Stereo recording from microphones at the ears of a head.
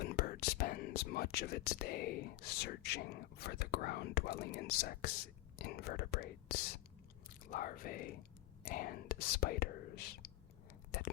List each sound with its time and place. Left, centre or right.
0.0 s speech: left